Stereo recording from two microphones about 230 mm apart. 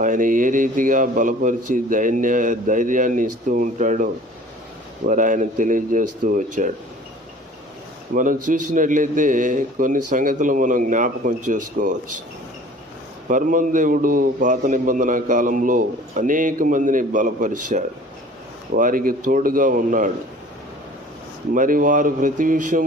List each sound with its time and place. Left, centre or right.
0.0 s a man's voice: right
8.1 s a man's voice: right
13.3 s a man's voice: right
18.7 s a man's voice: right
21.5 s a man's voice: right